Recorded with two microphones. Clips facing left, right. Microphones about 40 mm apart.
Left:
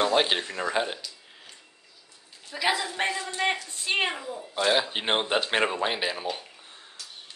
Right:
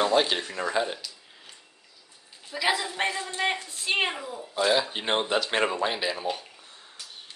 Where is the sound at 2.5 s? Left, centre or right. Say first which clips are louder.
Even; centre.